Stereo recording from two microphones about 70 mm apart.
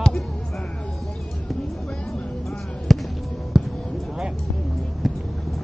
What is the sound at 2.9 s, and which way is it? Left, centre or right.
Basketball bounce, centre.